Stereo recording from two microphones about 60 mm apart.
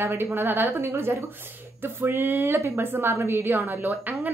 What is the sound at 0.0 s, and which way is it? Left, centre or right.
A woman's voice, right.